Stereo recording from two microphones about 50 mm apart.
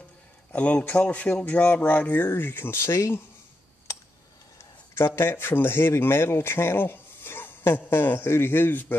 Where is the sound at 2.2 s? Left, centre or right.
Left.